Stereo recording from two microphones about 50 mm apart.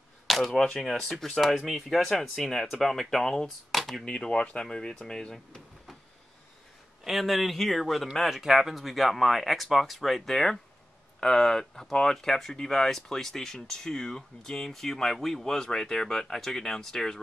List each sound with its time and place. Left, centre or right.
0.3 s speech: centre
4.0 s speech: centre
7.1 s speech: centre